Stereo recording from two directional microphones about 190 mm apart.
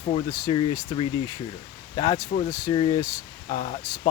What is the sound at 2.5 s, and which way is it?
Speech, 15° left (ahead or behind).